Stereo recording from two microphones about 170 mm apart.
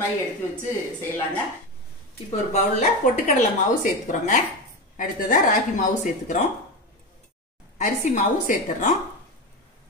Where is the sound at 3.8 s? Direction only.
45° left (ahead or behind).